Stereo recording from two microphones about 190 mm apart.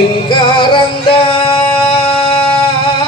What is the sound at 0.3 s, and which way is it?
Music, 25° left (ahead or behind).